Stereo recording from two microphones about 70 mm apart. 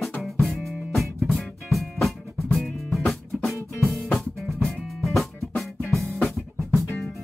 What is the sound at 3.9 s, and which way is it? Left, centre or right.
Drum, centre.